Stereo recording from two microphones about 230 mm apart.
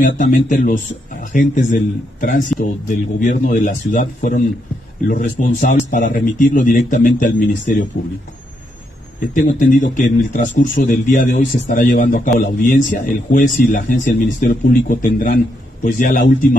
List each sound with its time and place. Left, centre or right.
0.0 s speech: left
9.5 s speech: left